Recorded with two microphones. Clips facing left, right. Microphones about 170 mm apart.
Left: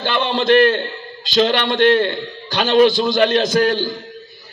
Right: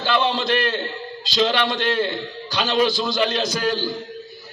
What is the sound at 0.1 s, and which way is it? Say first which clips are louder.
A man's voice: left 5 dB; 50° left (ahead or behind).